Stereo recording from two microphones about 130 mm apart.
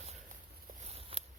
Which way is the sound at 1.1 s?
50° right (ahead or behind).